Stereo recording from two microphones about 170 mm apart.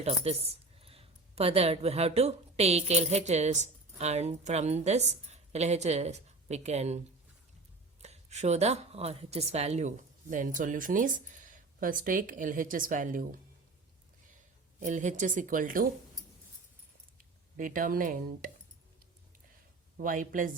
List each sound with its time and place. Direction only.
0.0 s speech: 35° right (ahead or behind)
8.0 s speech: 40° right (ahead or behind)
14.8 s speech: 45° right (ahead or behind)
17.2 s speech: 55° right (ahead or behind)
20.0 s speech: 55° right (ahead or behind)